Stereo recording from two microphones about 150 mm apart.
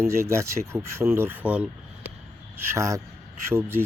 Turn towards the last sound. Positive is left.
turn(degrees=-15)  # may be behind; listen again after turning